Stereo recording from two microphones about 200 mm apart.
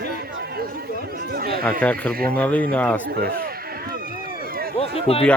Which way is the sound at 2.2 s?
5° left (ahead or behind).